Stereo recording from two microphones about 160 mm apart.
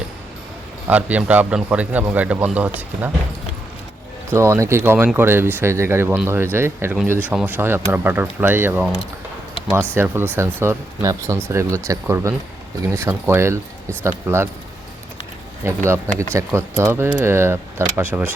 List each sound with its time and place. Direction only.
0.9 s speech: 10° right (ahead or behind)
4.3 s speech: 20° right (ahead or behind)
9.9 s speech: 15° right (ahead or behind)
15.6 s speech: 15° right (ahead or behind)